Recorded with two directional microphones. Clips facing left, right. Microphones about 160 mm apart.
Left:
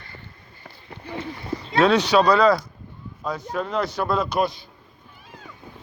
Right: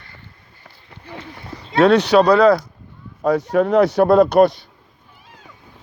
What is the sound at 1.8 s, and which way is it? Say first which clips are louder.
Speech: right 5 dB; 60° right (ahead or behind).